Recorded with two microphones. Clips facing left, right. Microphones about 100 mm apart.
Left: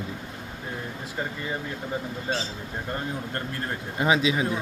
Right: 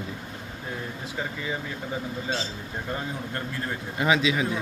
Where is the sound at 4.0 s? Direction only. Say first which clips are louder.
Even; 30° left (ahead or behind).